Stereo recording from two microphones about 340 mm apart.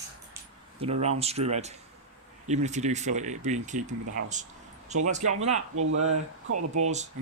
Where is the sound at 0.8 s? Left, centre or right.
Centre.